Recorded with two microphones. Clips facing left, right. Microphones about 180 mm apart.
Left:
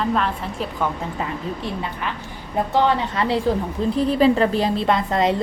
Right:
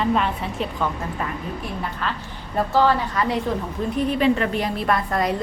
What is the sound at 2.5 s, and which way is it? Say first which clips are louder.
A woman's voice: even; 20° left (ahead or behind).